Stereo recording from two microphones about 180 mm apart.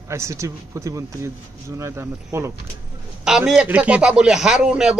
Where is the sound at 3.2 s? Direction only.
5° right (ahead or behind).